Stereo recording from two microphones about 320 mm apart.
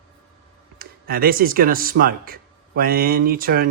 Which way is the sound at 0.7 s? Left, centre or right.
Right.